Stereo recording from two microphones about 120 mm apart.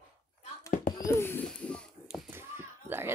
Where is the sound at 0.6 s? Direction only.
25° left (ahead or behind).